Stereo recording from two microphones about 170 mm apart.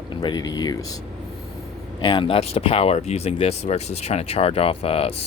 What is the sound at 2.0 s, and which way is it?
Speech, 25° left (ahead or behind).